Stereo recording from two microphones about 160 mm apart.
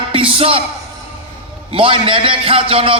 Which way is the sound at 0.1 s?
35° right (ahead or behind).